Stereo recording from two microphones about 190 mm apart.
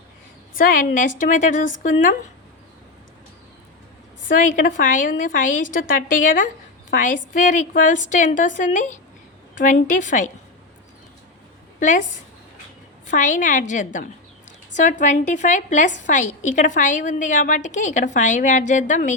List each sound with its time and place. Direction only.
0.6 s a woman's voice: 45° left (ahead or behind)
4.3 s a woman's voice: 45° left (ahead or behind)
11.8 s a woman's voice: 40° left (ahead or behind)
13.1 s a woman's voice: 40° left (ahead or behind)